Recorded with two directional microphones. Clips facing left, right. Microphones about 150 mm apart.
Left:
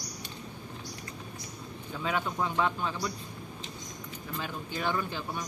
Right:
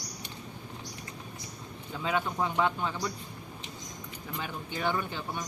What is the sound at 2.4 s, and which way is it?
Speech, 20° right (ahead or behind).